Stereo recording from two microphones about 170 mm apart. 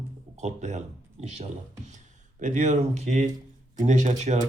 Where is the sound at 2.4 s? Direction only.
45° right (ahead or behind).